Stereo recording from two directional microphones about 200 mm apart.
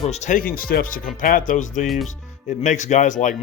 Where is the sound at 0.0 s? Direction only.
35° left (ahead or behind).